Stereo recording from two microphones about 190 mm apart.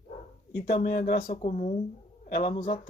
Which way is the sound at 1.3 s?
40° left (ahead or behind).